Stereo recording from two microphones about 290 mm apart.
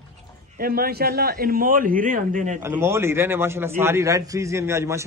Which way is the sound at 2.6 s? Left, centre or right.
Centre.